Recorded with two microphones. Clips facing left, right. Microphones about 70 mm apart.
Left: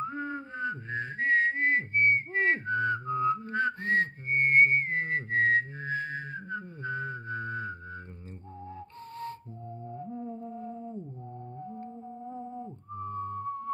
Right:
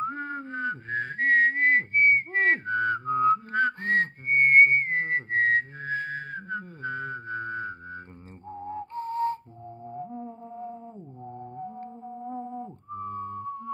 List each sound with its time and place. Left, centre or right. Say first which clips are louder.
0.0 s whistling: right 3 dB; right
8.6 s music: right 13 dB; right
12.3 s music: right 5 dB; right